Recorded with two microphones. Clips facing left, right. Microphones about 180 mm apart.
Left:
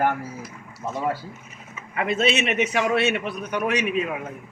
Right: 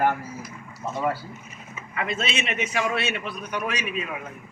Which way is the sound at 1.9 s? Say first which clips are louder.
Left 6 dB; 55° left (ahead or behind).